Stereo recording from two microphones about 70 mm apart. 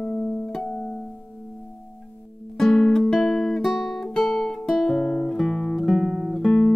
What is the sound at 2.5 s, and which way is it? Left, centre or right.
Music, centre.